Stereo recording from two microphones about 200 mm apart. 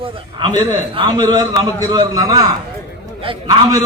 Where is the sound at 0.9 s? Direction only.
20° right (ahead or behind).